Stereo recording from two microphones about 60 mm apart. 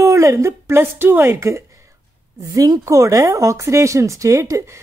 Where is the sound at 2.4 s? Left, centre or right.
Right.